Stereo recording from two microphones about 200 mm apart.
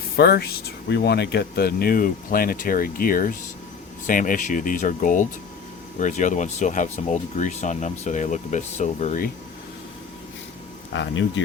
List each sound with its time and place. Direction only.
0.2 s speech: 55° left (ahead or behind); by 9.3 s 40° left (ahead or behind)
10.9 s speech: 65° left (ahead or behind)